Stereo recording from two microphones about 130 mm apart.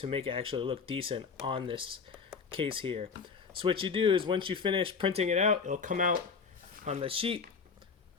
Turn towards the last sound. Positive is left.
turn(degrees=-45)  # may be behind; listen again after turning